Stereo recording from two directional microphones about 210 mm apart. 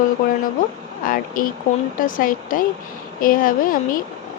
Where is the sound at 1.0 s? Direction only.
40° left (ahead or behind).